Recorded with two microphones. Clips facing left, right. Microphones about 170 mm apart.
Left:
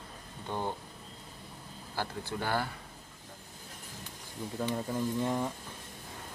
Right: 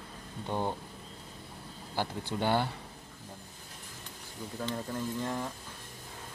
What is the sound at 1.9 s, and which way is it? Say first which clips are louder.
Speech: right 2 dB; 20° right (ahead or behind).